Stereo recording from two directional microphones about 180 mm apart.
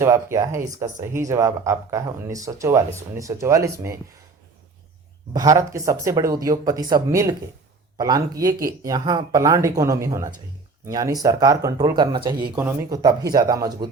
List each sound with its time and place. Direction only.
0.0 s speech: 15° right (ahead or behind)
5.3 s speech: 20° right (ahead or behind)